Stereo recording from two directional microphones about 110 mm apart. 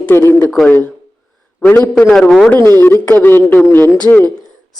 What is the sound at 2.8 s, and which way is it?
A man's voice, 20° left (ahead or behind).